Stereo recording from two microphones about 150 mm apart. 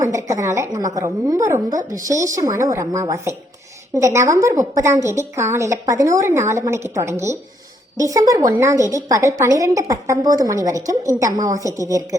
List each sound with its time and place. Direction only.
0.1 s a woman's voice: 20° right (ahead or behind)